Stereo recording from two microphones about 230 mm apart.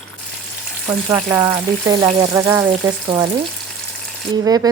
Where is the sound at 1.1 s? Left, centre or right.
Centre.